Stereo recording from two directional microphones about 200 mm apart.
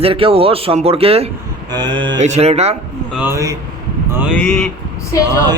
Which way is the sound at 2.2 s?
35° right (ahead or behind).